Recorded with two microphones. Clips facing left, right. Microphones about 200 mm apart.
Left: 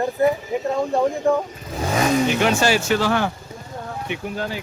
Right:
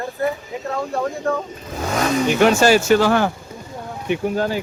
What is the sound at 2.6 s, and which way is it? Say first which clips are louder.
Speech: right 5 dB; 45° right (ahead or behind).